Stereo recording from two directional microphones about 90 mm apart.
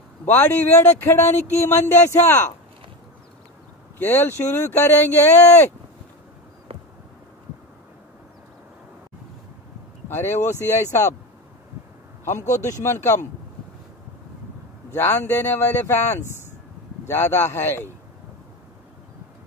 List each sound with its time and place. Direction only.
0.2 s speech: 20° left (ahead or behind)
4.0 s speech: 20° left (ahead or behind)
10.0 s speech: 25° left (ahead or behind)
12.3 s speech: 35° left (ahead or behind)
14.9 s speech: 25° left (ahead or behind)